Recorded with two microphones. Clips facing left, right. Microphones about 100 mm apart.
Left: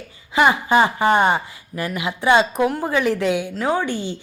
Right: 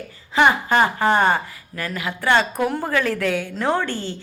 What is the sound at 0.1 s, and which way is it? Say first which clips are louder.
A woman's voice: even; 5° left (ahead or behind).